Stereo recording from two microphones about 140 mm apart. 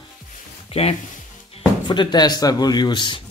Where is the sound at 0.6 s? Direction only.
45° left (ahead or behind).